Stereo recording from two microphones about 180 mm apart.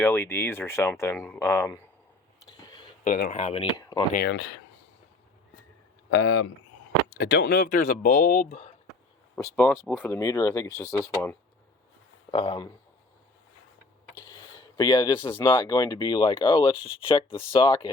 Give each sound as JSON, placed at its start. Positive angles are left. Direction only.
{"t": 0.0, "sound": "speech", "side_deg": 10}
{"t": 2.5, "sound": "a sound", "side_deg": 25}
{"t": 3.0, "sound": "speech", "side_deg": 45}
{"t": 4.1, "sound": "speech", "side_deg": 70}
{"t": 6.1, "sound": "speech", "side_deg": 90}
{"t": 7.1, "sound": "speech", "side_deg": 65}
{"t": 9.3, "sound": "speech", "side_deg": 10}
{"t": 14.8, "sound": "speech", "side_deg": 25}